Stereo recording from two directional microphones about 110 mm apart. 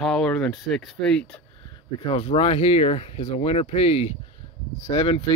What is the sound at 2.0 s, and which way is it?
Speech, 60° left (ahead or behind).